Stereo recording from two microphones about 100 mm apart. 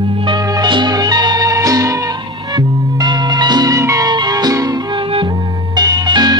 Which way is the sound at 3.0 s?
45° right (ahead or behind).